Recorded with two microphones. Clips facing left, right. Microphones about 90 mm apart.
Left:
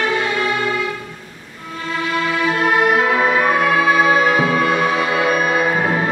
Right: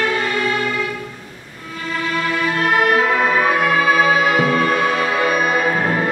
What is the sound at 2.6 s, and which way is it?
Music, 5° left (ahead or behind).